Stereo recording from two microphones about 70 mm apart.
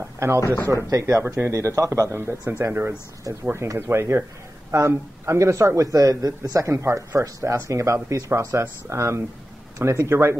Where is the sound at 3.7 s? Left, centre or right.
Right.